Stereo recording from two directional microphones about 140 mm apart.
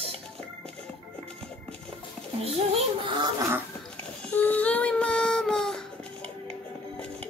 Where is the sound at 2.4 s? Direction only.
40° right (ahead or behind).